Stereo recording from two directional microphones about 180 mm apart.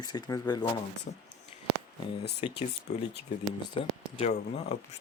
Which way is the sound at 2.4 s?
30° left (ahead or behind).